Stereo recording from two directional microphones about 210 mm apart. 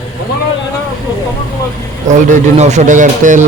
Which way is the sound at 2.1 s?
35° right (ahead or behind).